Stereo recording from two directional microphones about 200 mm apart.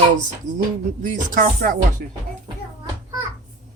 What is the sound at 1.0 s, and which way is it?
Speech, 40° right (ahead or behind).